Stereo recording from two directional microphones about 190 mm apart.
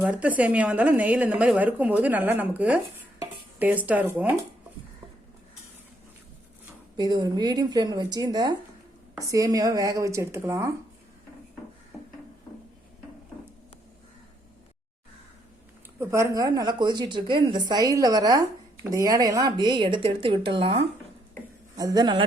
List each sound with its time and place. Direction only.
0.0 s a woman's voice: 5° right (ahead or behind)
6.9 s a woman's voice: 20° right (ahead or behind)
16.0 s a woman's voice: 15° right (ahead or behind)